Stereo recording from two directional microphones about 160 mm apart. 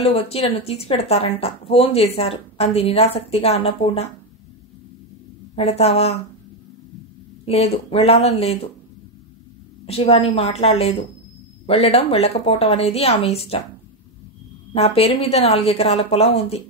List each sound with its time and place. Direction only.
0.0 s speech: 40° left (ahead or behind)
5.6 s speech: 40° left (ahead or behind)
7.4 s speech: 40° left (ahead or behind)
9.8 s speech: 40° left (ahead or behind)
14.7 s speech: 40° left (ahead or behind)